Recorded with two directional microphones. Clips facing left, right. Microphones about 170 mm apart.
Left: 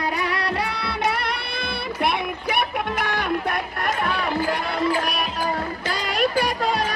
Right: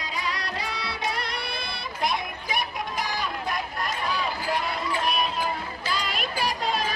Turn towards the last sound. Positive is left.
turn(degrees=50)  # may be behind; listen again after turning